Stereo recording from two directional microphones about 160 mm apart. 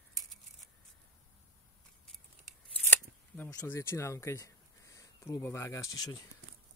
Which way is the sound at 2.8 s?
15° left (ahead or behind).